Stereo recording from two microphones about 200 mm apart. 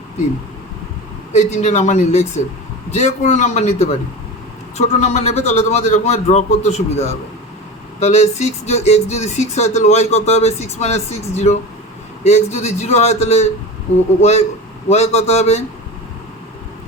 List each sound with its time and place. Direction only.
1.3 s speech: 35° left (ahead or behind)
14.8 s speech: 35° left (ahead or behind)